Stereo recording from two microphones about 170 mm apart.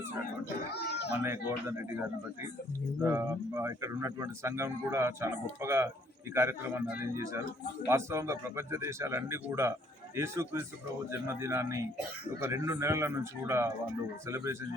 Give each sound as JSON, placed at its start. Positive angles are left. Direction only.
{"t": 0.8, "sound": "a sound", "side_deg": 80}
{"t": 1.2, "sound": "speech", "side_deg": -15}
{"t": 3.0, "sound": "speech", "side_deg": -15}